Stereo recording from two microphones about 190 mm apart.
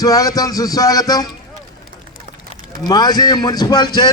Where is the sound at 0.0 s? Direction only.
20° left (ahead or behind).